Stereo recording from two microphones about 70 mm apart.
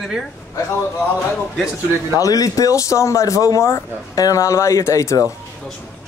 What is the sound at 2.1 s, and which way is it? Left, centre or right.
Speech, left.